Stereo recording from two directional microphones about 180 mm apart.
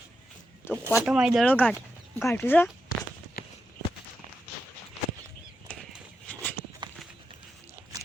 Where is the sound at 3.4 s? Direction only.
55° left (ahead or behind).